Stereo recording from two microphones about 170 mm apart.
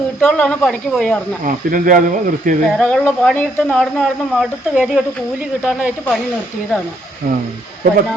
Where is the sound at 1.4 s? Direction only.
55° right (ahead or behind).